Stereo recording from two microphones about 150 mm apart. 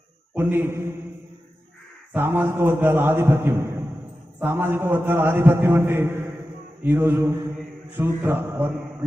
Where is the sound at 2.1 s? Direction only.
15° right (ahead or behind).